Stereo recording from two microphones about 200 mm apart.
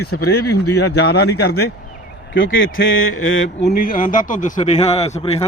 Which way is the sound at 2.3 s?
70° left (ahead or behind).